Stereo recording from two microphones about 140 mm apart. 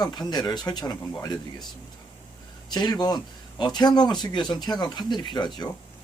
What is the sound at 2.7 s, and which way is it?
Speech, 30° left (ahead or behind).